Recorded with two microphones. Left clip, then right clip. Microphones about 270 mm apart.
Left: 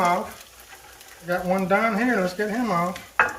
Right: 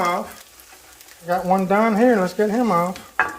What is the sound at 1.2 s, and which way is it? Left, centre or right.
Speech, centre.